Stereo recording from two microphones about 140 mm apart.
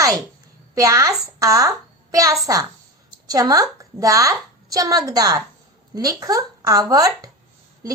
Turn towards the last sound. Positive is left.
turn(degrees=-25)  # may be behind; listen again after turning